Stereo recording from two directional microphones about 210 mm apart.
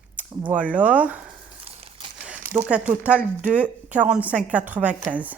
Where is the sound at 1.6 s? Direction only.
30° right (ahead or behind).